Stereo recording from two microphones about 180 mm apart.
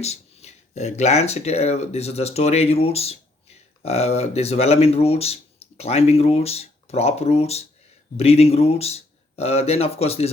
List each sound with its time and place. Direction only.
0.0 s speech: 35° left (ahead or behind)